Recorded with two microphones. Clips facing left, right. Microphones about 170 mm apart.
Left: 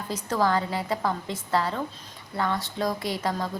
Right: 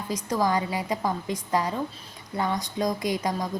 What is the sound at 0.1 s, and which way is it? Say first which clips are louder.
A woman's voice: even; 15° right (ahead or behind).